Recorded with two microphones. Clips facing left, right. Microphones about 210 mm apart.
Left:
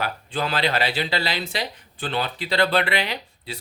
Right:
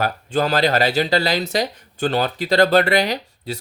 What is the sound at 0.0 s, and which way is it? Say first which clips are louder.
Speech: right 7 dB; 45° right (ahead or behind).